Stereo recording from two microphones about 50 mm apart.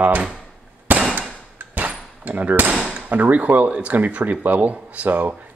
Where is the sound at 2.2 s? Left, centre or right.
Right.